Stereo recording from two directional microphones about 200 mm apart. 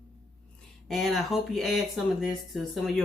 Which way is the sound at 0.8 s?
Centre (ahead or behind).